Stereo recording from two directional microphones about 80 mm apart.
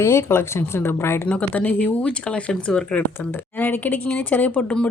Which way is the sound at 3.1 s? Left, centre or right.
Left.